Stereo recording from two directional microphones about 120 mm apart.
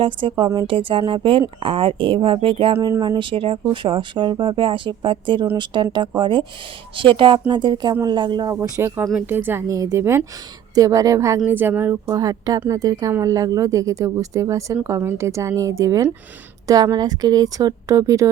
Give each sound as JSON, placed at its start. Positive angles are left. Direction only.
{"t": 0.0, "sound": "speech", "side_deg": -45}
{"t": 8.5, "sound": "speech", "side_deg": -15}
{"t": 11.4, "sound": "speech", "side_deg": -15}
{"t": 12.1, "sound": "speech", "side_deg": -30}